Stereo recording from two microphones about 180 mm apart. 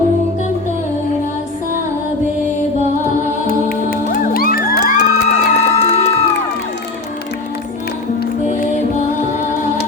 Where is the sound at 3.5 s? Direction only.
55° left (ahead or behind); by 6.2 s 35° left (ahead or behind).